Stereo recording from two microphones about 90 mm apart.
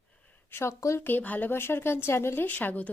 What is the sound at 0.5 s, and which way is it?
Speech, 30° left (ahead or behind).